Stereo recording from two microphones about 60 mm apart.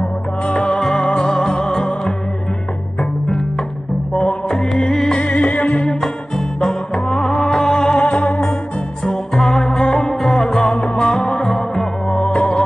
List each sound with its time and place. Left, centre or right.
0.0 s music: centre
5.2 s music: centre
5.7 s music: centre